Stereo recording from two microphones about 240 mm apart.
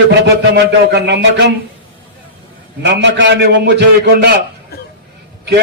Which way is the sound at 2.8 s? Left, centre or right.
Right.